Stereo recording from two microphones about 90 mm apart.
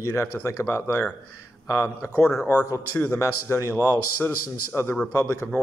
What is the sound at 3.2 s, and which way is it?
Speech, 30° left (ahead or behind).